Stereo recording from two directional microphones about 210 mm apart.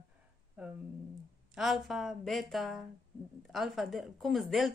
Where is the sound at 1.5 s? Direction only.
Centre (ahead or behind).